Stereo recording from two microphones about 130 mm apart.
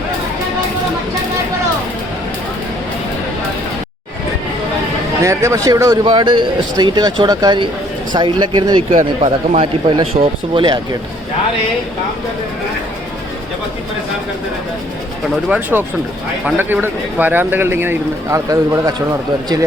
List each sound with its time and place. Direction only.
5.2 s speech: 25° right (ahead or behind)
8.9 s speech: 70° right (ahead or behind)
9.6 s a man's voice: 45° right (ahead or behind)
15.4 s speech: 10° right (ahead or behind)